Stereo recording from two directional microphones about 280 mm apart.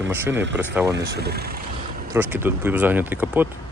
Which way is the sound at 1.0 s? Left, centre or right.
Right.